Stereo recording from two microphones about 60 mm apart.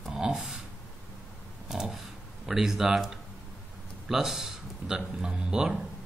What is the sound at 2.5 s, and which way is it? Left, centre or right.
Speech, centre.